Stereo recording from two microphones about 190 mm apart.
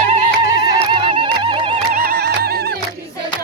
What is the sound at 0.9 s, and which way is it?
Music, 30° right (ahead or behind).